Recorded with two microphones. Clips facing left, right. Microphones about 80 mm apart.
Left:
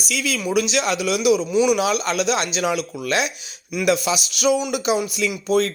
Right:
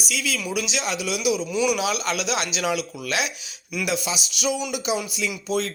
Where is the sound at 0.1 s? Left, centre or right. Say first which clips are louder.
Left 6 dB; left.